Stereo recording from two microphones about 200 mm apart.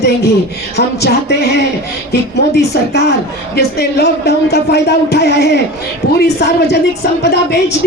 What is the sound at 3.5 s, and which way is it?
Speech, 55° left (ahead or behind).